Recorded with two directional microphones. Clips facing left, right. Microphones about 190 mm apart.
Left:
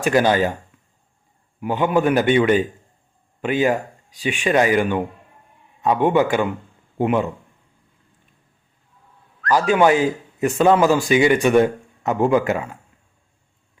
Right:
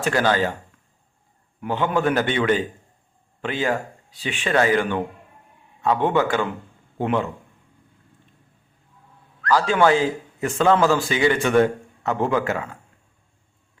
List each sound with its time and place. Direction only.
0.0 s a man's voice: 15° left (ahead or behind)
1.6 s a man's voice: 15° left (ahead or behind)
9.5 s a man's voice: 15° left (ahead or behind)